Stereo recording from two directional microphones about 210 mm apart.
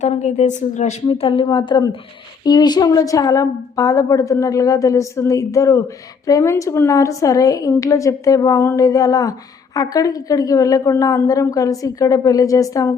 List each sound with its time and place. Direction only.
0.0 s a woman's voice: 30° left (ahead or behind); by 13.0 s 15° left (ahead or behind)